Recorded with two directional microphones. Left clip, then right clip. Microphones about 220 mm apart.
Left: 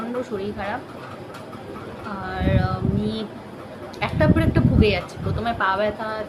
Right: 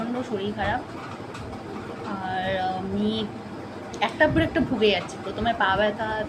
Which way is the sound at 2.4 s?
20° left (ahead or behind).